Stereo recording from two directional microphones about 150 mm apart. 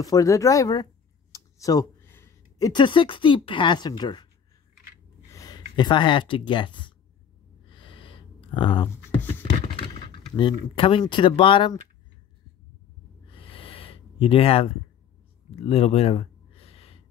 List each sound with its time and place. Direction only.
0.0 s speech: 25° left (ahead or behind)
1.3 s computer keyboard: 25° left (ahead or behind)
2.7 s speech: 30° left (ahead or behind)
5.3 s speech: 25° left (ahead or behind)
7.7 s a sound: 35° left (ahead or behind)
9.4 s speech: 35° left (ahead or behind)
13.3 s a sound: 35° left (ahead or behind)